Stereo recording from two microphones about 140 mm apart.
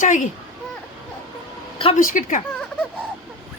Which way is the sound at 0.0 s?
65° left (ahead or behind).